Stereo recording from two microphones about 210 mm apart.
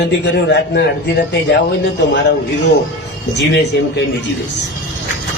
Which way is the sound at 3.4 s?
60° left (ahead or behind).